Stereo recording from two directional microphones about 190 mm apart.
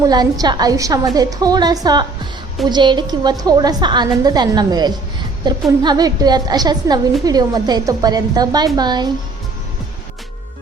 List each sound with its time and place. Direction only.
0.0 s a woman's voice: 20° right (ahead or behind)